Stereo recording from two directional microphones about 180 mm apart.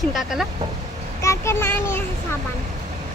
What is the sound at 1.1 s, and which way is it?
Speech, 15° left (ahead or behind).